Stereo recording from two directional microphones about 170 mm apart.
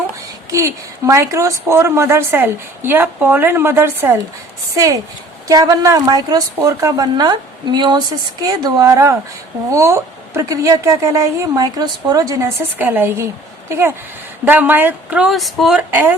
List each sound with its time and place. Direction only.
0.5 s a woman's voice: 15° right (ahead or behind)
5.5 s a woman's voice: 20° right (ahead or behind)